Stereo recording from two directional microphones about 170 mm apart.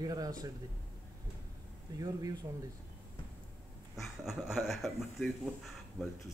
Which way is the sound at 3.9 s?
Centre (ahead or behind).